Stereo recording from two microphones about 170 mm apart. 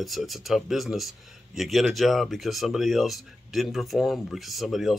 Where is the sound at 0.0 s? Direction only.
Centre (ahead or behind).